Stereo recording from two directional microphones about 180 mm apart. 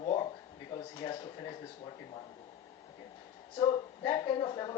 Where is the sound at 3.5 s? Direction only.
25° left (ahead or behind).